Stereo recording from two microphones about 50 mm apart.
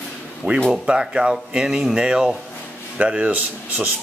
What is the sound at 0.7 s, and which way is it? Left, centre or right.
Speech, centre.